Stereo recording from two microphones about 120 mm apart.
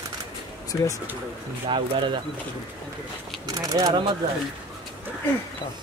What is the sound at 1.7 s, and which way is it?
Speech, 45° right (ahead or behind).